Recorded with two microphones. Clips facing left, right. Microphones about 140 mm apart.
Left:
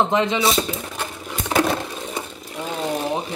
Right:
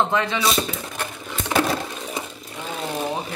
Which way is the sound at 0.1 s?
20° left (ahead or behind).